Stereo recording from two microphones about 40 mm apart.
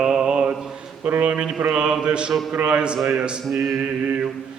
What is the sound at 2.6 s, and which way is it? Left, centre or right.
Music, right.